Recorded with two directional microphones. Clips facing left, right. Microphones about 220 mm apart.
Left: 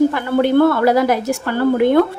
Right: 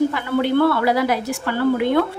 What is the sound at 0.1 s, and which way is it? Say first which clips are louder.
A woman's voice: left 4 dB; 45° left (ahead or behind).